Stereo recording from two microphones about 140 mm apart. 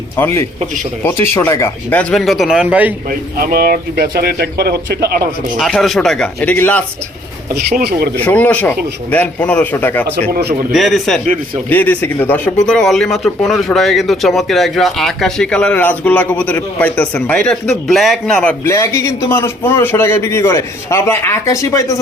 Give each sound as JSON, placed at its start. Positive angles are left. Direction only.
{"t": 0.2, "sound": "speech", "side_deg": 15}
{"t": 3.3, "sound": "speech", "side_deg": -90}
{"t": 5.5, "sound": "speech", "side_deg": 0}
{"t": 8.1, "sound": "speech", "side_deg": 10}
{"t": 10.7, "sound": "speech", "side_deg": 0}
{"t": 11.7, "sound": "speech", "side_deg": 10}
{"t": 18.6, "sound": "a man's voice", "side_deg": 20}